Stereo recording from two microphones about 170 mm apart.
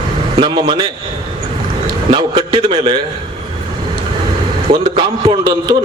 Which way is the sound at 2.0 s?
25° right (ahead or behind).